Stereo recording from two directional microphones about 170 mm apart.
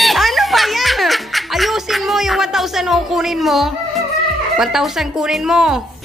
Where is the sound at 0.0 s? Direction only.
Centre (ahead or behind).